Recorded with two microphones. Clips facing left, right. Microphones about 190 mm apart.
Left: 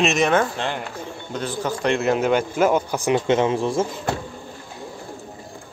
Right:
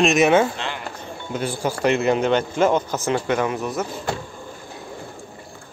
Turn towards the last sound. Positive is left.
turn(degrees=25)  # may be behind; listen again after turning